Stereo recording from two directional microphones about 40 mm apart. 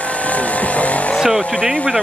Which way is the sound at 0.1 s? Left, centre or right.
Left.